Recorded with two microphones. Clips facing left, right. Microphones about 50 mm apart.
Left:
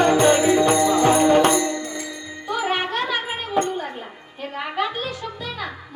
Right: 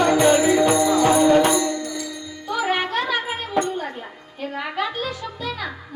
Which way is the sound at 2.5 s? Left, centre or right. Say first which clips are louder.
Right 1 dB; left.